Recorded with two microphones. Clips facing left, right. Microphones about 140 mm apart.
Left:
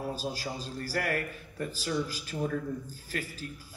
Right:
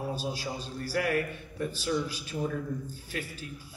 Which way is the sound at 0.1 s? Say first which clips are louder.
Right 1 dB; 40° left (ahead or behind).